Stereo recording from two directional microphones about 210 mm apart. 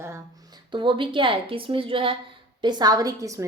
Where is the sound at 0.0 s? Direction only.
15° right (ahead or behind).